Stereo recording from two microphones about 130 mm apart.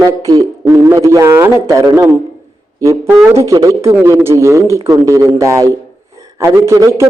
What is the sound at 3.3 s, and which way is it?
A man's voice, 25° right (ahead or behind).